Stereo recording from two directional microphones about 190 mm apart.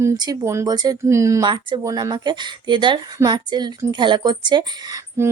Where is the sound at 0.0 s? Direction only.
20° right (ahead or behind).